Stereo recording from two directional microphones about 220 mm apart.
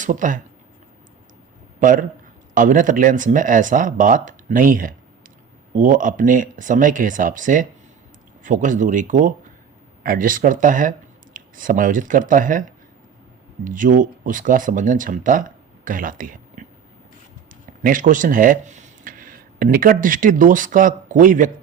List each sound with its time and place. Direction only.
0.0 s speech: 35° right (ahead or behind)
1.8 s speech: 35° right (ahead or behind)
13.7 s speech: 35° right (ahead or behind)